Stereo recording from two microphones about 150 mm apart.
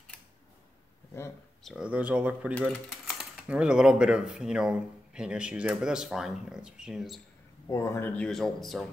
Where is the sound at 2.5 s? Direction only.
5° left (ahead or behind).